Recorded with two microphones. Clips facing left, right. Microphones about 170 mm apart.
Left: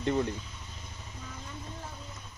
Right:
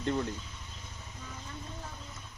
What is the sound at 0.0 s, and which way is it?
Speech, 10° left (ahead or behind).